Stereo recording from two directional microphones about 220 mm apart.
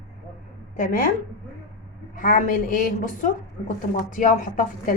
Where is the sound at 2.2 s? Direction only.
40° left (ahead or behind).